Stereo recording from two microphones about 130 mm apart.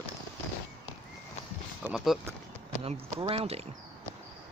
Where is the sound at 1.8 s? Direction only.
5° right (ahead or behind).